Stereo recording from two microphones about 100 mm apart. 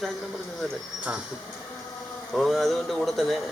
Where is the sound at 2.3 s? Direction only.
Centre (ahead or behind).